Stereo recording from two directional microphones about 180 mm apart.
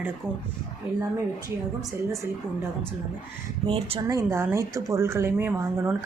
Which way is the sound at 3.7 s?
30° right (ahead or behind).